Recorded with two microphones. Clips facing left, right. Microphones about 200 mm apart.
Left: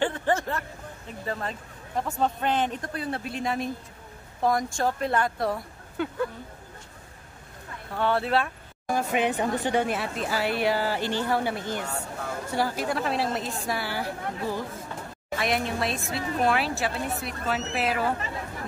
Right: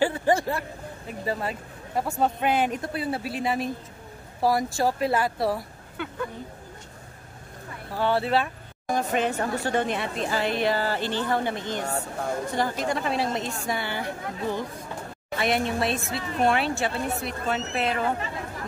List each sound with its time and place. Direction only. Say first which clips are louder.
0.0 s a woman's voice: right 3 dB; 10° right (ahead or behind)
6.0 s speech: left 5 dB; 40° left (ahead or behind)
7.9 s a woman's voice: right 1 dB; centre (ahead or behind)
8.9 s a woman's voice: even; 10° left (ahead or behind)